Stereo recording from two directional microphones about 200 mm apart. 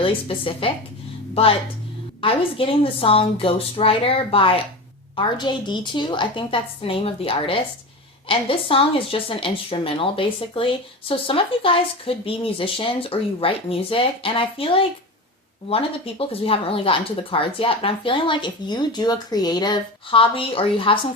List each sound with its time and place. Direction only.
0.0 s a woman's voice: 25° left (ahead or behind)
2.2 s a woman's voice: 25° left (ahead or behind)